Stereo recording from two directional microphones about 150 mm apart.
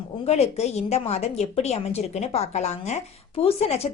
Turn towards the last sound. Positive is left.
turn(degrees=45)  # may be behind; listen again after turning